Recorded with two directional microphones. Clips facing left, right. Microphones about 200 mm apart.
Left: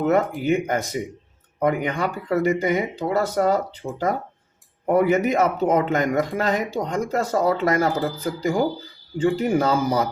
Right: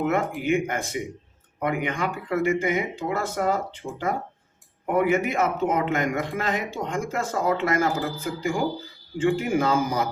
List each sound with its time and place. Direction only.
0.0 s speech: 40° left (ahead or behind)